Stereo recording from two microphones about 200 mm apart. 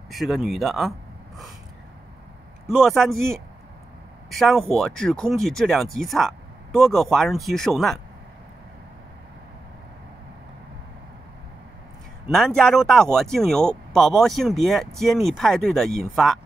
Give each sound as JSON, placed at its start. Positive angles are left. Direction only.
{"t": 0.1, "sound": "speech", "side_deg": 0}
{"t": 2.7, "sound": "speech", "side_deg": 0}
{"t": 12.3, "sound": "speech", "side_deg": 0}